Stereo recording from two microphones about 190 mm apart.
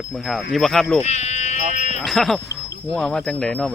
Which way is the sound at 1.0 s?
35° left (ahead or behind).